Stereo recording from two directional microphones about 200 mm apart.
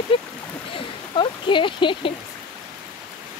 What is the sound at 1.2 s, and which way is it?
Speech, 25° left (ahead or behind).